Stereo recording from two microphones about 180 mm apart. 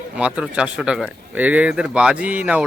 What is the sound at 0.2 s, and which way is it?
Speech, 5° right (ahead or behind).